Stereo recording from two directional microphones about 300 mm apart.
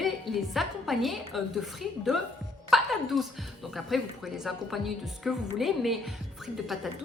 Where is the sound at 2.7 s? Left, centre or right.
Centre.